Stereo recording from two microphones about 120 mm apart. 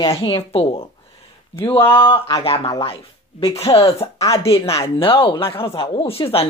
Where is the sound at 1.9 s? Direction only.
45° left (ahead or behind).